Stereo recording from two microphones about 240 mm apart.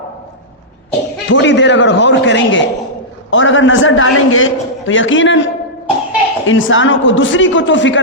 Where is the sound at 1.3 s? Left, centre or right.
Left.